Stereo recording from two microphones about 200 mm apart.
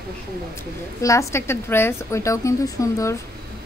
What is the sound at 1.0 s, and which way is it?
A woman's voice, 15° left (ahead or behind).